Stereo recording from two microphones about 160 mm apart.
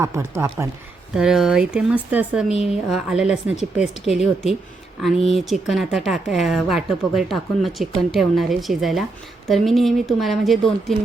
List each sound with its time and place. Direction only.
0.0 s speech: 15° right (ahead or behind)
1.1 s speech: 5° right (ahead or behind)